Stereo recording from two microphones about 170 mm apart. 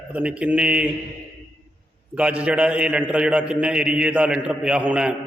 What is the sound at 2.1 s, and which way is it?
A man's voice, 5° right (ahead or behind).